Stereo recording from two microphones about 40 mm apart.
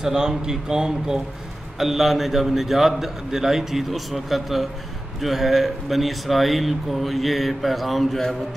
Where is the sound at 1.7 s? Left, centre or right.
Centre.